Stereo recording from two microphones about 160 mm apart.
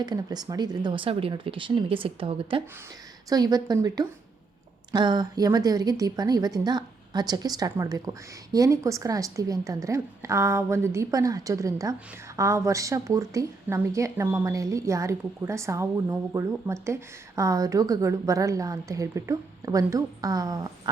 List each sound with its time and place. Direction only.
0.0 s speech: 25° right (ahead or behind)
3.2 s a woman's voice: 25° right (ahead or behind)